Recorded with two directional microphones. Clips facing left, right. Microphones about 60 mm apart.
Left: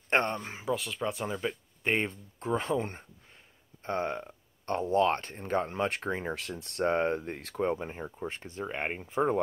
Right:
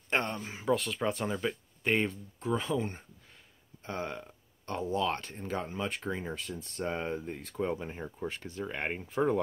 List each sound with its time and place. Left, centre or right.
0.1 s speech: left
0.7 s speech: centre
1.8 s speech: left
2.4 s speech: left
3.8 s a sound: left
4.8 s speech: left
5.7 s speech: left
6.3 s speech: left
7.8 s speech: centre
8.3 s speech: left
8.6 s speech: centre